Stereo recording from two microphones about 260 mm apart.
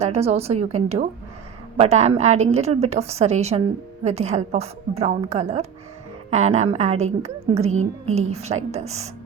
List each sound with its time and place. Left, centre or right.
0.0 s a woman's voice: right